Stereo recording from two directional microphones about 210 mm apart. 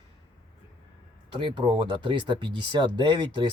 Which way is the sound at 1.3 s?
20° right (ahead or behind).